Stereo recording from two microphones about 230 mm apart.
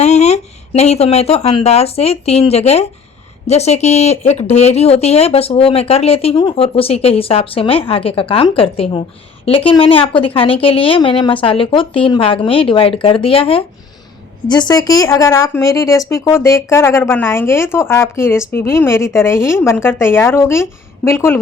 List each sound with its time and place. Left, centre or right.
0.0 s speech: left; by 21.4 s centre